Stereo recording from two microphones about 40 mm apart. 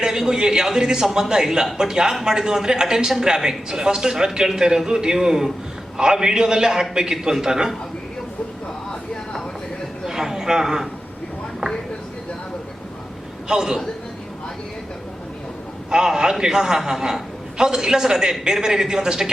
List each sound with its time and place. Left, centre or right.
0.0 s a man's voice: centre
10.1 s a sound: centre
13.5 s a man's voice: centre
15.9 s a man's voice: centre